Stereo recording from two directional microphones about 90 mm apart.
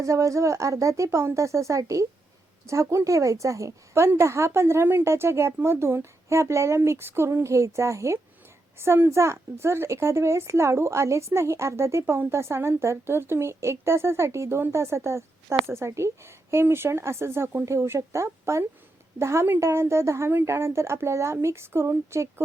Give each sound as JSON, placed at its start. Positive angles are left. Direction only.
{"t": 0.0, "sound": "a woman's voice", "side_deg": -35}